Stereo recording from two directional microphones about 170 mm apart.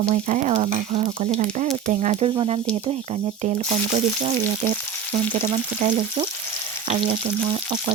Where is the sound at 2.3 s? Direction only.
30° right (ahead or behind).